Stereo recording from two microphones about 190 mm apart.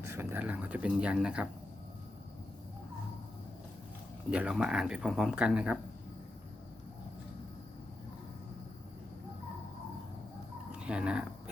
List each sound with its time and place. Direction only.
0.0 s speech: 15° right (ahead or behind)
4.3 s speech: 5° right (ahead or behind)
10.7 s speech: 5° right (ahead or behind)